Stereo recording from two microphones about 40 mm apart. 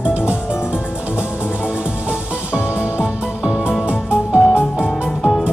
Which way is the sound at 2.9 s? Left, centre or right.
Right.